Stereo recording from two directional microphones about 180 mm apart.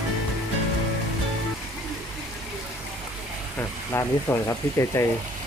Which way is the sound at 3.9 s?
15° left (ahead or behind).